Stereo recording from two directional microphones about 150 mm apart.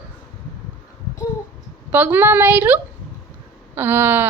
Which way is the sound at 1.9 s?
10° right (ahead or behind).